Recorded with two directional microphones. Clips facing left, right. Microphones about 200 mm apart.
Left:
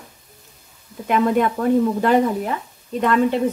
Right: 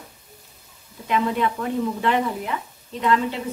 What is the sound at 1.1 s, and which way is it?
Speech, 50° left (ahead or behind).